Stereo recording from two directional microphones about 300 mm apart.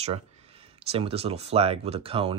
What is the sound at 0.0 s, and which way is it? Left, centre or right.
Speech, centre.